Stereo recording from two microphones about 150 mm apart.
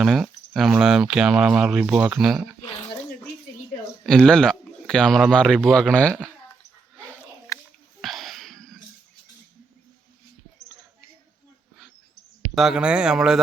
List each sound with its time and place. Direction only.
0.0 s speech: centre (ahead or behind)
4.0 s speech: 5° left (ahead or behind)
7.5 s biting: 20° left (ahead or behind)
8.0 s wheeze: centre (ahead or behind)
12.5 s speech: 5° right (ahead or behind)